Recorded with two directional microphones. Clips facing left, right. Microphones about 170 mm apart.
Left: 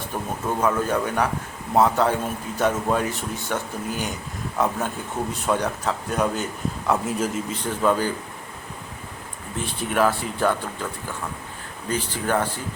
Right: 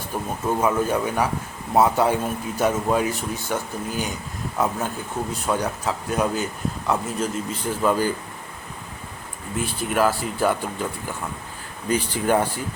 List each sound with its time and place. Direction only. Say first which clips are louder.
0.1 s speech: right 3 dB; 5° right (ahead or behind)
9.6 s speech: even; 5° right (ahead or behind)
11.9 s speech: right 4 dB; 15° right (ahead or behind)